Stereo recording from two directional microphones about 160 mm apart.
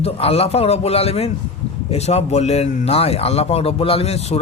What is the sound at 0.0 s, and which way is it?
A man's voice, 40° left (ahead or behind).